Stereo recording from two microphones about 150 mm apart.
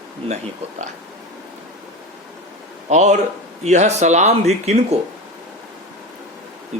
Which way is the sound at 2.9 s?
50° right (ahead or behind).